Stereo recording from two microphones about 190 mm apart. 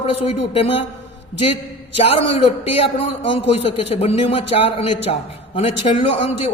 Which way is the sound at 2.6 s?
30° left (ahead or behind).